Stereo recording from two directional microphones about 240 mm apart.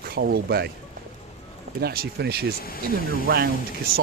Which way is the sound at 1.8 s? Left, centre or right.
Right.